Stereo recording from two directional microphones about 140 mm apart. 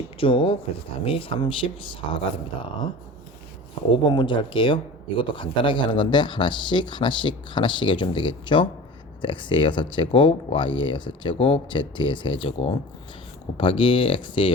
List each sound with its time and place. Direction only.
0.2 s speech: 40° left (ahead or behind)
3.9 s speech: 35° left (ahead or behind)